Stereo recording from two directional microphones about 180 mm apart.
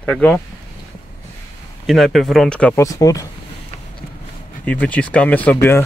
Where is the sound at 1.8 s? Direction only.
Centre (ahead or behind).